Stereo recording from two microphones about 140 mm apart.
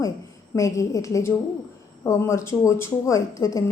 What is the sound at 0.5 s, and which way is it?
A woman's voice, 25° left (ahead or behind).